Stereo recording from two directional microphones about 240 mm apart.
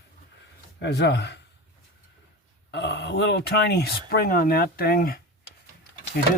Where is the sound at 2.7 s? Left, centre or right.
Left.